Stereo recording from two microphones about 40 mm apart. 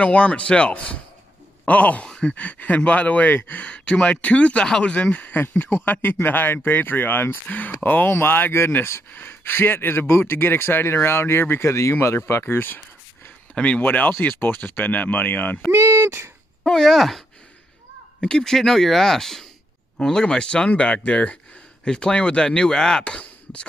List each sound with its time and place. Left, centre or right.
0.0 s speech: left
2.0 s a sound: centre
2.3 s speech: left
5.3 s speech: left
8.1 s speech: left
9.1 s speech: left
13.6 s speech: left
13.8 s speech: left
15.7 s speech: right
16.6 s speech: centre
18.2 s speech: centre; by 21.4 s left
21.8 s speech: centre
23.0 s a sound: left